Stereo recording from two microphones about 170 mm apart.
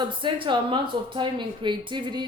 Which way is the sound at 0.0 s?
30° right (ahead or behind).